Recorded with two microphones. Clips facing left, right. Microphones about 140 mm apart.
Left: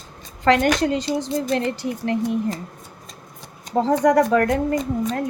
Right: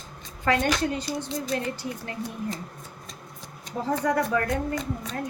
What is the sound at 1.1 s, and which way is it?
Speech, 70° left (ahead or behind).